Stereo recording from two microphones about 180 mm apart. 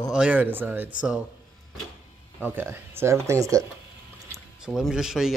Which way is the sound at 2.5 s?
15° right (ahead or behind).